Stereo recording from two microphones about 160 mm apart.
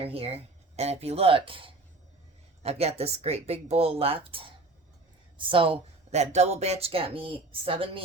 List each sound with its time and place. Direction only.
0.0 s speech: 35° right (ahead or behind)